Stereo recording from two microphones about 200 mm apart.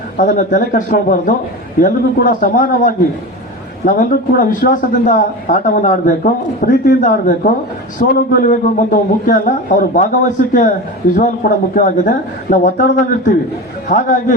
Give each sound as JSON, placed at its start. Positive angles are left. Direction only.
{"t": 0.2, "sound": "a man's voice", "side_deg": 40}